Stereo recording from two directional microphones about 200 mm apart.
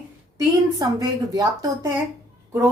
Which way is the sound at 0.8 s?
20° right (ahead or behind).